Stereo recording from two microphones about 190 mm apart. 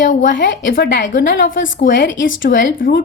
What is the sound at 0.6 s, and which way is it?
A woman's voice, 55° left (ahead or behind).